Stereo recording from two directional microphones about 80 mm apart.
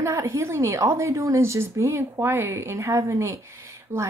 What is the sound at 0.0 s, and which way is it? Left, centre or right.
Speech, right.